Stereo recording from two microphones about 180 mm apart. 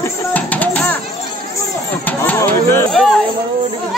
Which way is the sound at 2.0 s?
10° left (ahead or behind).